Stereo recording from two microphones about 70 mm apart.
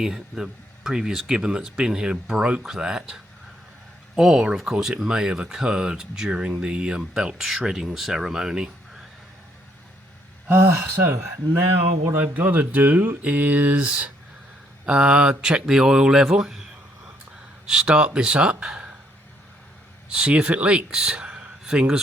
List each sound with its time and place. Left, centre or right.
0.0 s speech: centre
10.5 s speech: right; by 16.6 s centre
17.7 s speech: centre
20.1 s speech: centre